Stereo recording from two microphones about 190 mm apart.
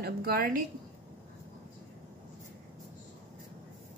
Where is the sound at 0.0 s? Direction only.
55° right (ahead or behind).